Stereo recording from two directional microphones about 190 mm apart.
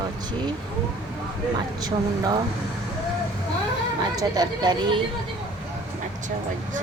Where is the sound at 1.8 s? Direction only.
20° right (ahead or behind).